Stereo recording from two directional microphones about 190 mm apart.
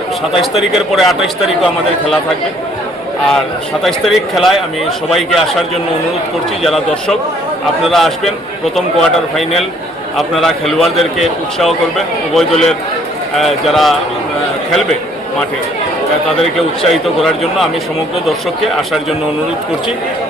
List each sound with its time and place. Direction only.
0.5 s a man's voice: centre (ahead or behind)
3.8 s a man's voice: centre (ahead or behind)
16.4 s a man's voice: centre (ahead or behind)